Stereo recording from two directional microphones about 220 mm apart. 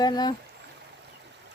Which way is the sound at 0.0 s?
20° left (ahead or behind).